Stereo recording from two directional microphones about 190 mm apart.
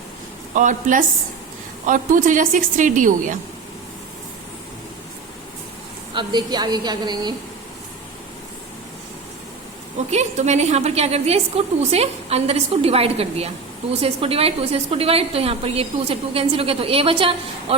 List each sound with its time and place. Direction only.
0.5 s a woman's voice: 40° right (ahead or behind)
6.1 s a woman's voice: 20° right (ahead or behind)
10.1 s a woman's voice: 35° right (ahead or behind)